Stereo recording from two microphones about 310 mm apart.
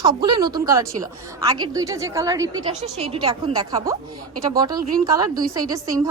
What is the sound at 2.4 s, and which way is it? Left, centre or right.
Speech, right.